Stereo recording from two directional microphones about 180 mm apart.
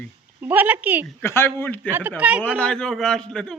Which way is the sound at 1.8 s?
10° right (ahead or behind).